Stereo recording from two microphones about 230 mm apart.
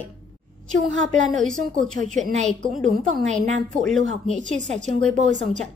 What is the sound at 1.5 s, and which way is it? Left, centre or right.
A woman's voice, right.